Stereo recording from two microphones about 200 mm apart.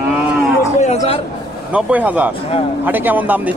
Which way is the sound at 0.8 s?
30° left (ahead or behind).